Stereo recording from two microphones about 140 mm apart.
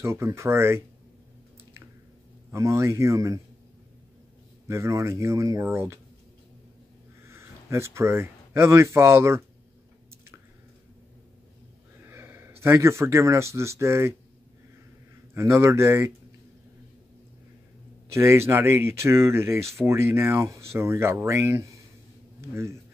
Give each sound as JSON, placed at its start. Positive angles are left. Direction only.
{"t": 0.0, "sound": "speech", "side_deg": -20}
{"t": 2.5, "sound": "speech", "side_deg": -20}
{"t": 4.6, "sound": "speech", "side_deg": -20}
{"t": 7.2, "sound": "speech", "side_deg": -20}
{"t": 12.0, "sound": "speech", "side_deg": -15}
{"t": 15.3, "sound": "speech", "side_deg": -20}
{"t": 18.1, "sound": "speech", "side_deg": -20}